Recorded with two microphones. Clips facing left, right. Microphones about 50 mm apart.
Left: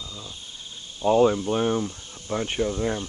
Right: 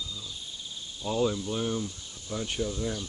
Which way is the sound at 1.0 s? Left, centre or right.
Left.